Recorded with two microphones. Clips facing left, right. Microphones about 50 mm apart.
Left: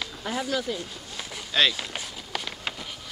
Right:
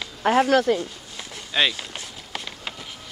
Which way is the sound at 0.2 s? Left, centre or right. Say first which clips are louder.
Right 12 dB; right.